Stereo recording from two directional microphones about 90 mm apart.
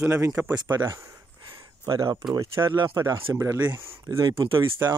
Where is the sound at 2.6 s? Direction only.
65° right (ahead or behind).